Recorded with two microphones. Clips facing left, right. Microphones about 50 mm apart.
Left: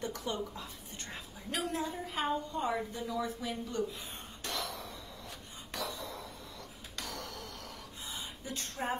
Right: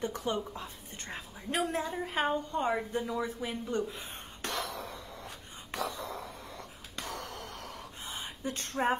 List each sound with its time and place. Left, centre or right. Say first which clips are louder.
0.0 s a woman's voice: right 4 dB; right
4.4 s a sound: right 3 dB; right
7.0 s gasp: right 3 dB; right